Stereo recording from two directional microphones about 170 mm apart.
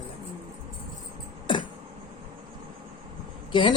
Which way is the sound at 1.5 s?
30° left (ahead or behind).